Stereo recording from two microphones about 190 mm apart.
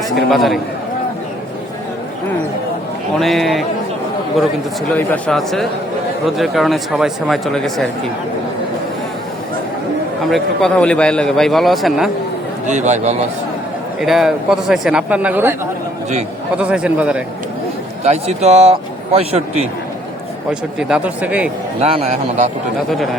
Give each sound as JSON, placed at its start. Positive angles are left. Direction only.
{"t": 0.3, "sound": "a man's voice", "side_deg": 0}
{"t": 3.2, "sound": "a man's voice", "side_deg": 0}
{"t": 4.9, "sound": "a man's voice", "side_deg": 5}
{"t": 10.2, "sound": "a man's voice", "side_deg": 0}
{"t": 12.6, "sound": "a man's voice", "side_deg": -40}
{"t": 14.0, "sound": "a man's voice", "side_deg": 0}
{"t": 16.6, "sound": "a man's voice", "side_deg": -5}
{"t": 18.0, "sound": "a man's voice", "side_deg": -35}
{"t": 20.5, "sound": "a man's voice", "side_deg": -5}
{"t": 21.8, "sound": "a man's voice", "side_deg": -30}